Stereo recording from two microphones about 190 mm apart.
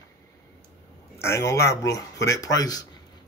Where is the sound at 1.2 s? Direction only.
15° left (ahead or behind).